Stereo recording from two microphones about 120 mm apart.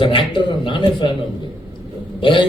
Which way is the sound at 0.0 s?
45° left (ahead or behind).